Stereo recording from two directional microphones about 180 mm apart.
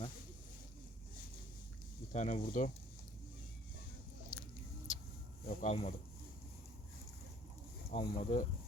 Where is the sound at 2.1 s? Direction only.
40° left (ahead or behind).